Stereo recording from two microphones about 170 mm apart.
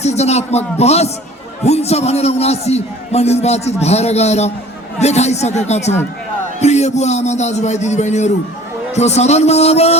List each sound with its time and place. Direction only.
0.0 s a man's voice: 40° left (ahead or behind)